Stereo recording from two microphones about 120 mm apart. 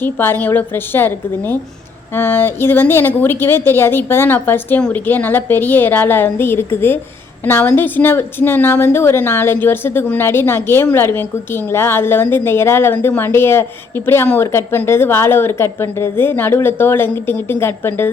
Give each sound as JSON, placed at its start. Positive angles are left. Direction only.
{"t": 0.0, "sound": "a woman's voice", "side_deg": 15}